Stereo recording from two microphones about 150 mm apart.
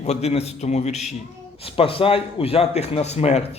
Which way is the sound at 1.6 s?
40° left (ahead or behind).